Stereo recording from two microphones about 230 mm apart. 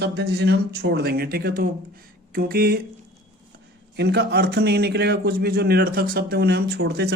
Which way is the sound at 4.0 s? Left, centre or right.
Right.